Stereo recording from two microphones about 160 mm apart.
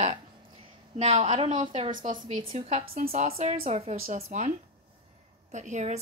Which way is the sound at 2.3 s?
35° right (ahead or behind).